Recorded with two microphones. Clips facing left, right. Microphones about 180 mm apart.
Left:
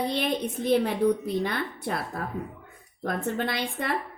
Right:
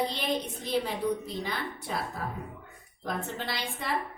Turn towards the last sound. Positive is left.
turn(degrees=55)  # may be behind; listen again after turning